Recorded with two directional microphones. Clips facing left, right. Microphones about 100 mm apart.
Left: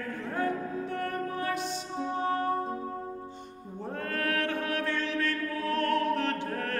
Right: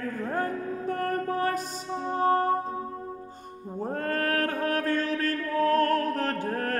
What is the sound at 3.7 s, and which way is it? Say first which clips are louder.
Mantra: right 5 dB; 40° right (ahead or behind).